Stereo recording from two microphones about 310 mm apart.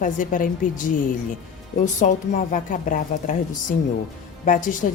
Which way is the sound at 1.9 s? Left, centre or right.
Left.